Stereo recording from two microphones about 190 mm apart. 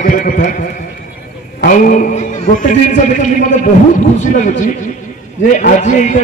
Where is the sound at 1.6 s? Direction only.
45° left (ahead or behind).